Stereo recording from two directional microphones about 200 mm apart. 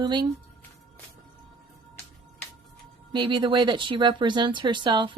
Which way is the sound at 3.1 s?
25° right (ahead or behind).